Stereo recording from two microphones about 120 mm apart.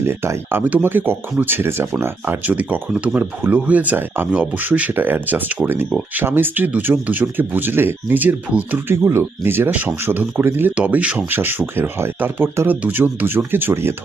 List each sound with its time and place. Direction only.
0.0 s speech: 20° right (ahead or behind)